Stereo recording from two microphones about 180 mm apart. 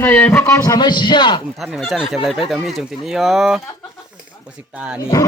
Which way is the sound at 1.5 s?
Centre (ahead or behind).